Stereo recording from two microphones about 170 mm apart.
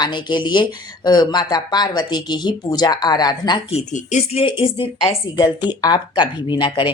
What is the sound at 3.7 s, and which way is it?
Speech, 40° left (ahead or behind).